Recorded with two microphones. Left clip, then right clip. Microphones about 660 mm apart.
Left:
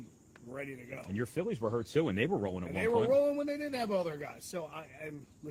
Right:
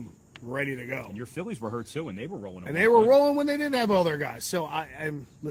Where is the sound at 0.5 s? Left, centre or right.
Right.